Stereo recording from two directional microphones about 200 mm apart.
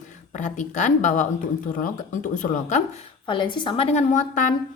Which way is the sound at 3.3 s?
25° left (ahead or behind).